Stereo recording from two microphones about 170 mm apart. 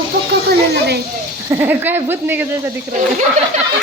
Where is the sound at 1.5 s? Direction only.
10° right (ahead or behind).